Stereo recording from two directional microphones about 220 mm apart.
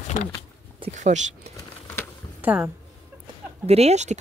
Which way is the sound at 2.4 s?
5° right (ahead or behind).